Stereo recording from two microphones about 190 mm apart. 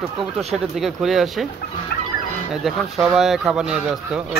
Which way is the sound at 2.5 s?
Centre (ahead or behind).